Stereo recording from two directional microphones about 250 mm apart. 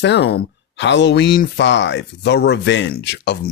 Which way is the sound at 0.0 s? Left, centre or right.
Left.